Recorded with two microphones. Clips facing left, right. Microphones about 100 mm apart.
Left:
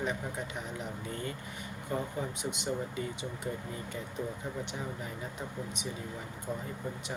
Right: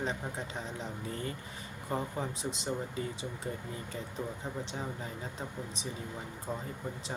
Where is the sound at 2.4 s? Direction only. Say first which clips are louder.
Left 1 dB; 35° right (ahead or behind).